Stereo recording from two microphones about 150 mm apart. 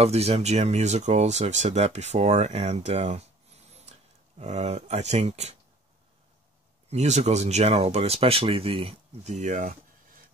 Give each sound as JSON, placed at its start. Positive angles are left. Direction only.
{"t": 0.0, "sound": "speech", "side_deg": -45}
{"t": 6.9, "sound": "speech", "side_deg": -50}